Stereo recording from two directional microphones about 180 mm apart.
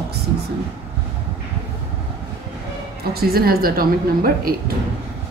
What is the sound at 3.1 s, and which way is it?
A woman's voice, 60° right (ahead or behind).